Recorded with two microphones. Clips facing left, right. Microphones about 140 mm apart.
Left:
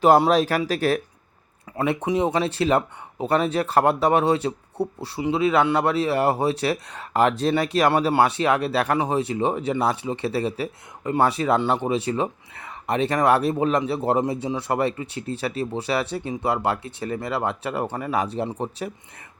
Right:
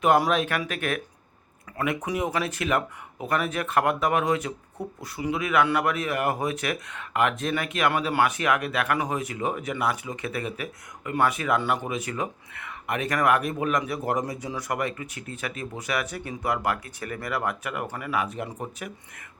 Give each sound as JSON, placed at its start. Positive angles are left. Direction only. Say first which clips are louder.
{"t": 0.0, "sound": "speech", "louder": "left 5 dB", "side_deg": 35}